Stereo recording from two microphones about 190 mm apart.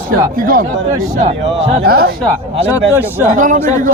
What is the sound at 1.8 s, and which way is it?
Speech, 55° right (ahead or behind).